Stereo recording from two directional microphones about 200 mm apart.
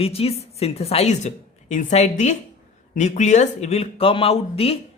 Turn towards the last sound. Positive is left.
turn(degrees=30)  # may be behind; listen again after turning